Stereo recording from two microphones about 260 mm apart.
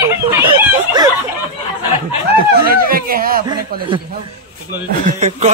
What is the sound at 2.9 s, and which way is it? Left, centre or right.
Speech, right.